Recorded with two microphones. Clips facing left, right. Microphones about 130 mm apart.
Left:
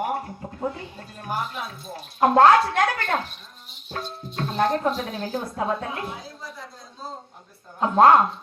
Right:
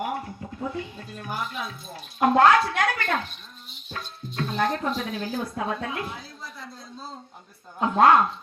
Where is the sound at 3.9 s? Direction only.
30° left (ahead or behind).